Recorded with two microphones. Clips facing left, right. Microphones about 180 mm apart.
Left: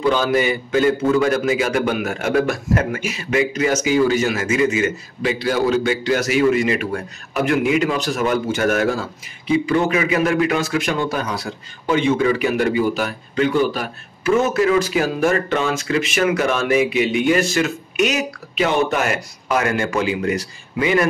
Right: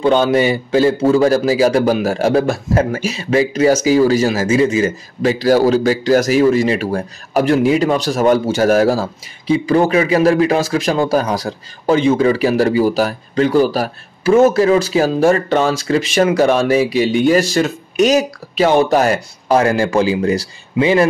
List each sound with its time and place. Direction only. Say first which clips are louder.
0.0 s speech: right 5 dB; 30° right (ahead or behind)